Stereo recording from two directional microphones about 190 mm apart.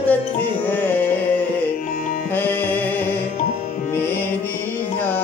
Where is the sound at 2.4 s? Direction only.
10° left (ahead or behind).